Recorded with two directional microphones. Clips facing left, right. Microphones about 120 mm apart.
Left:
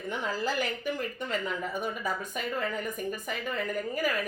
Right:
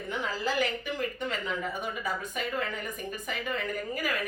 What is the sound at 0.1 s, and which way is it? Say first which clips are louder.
A woman's voice: even; 45° left (ahead or behind).